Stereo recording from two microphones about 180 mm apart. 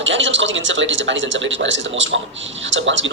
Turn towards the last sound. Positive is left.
turn(degrees=-90)